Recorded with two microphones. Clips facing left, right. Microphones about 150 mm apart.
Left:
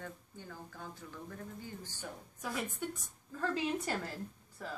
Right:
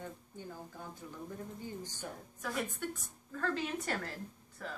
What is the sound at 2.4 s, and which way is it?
A woman's voice, 10° left (ahead or behind).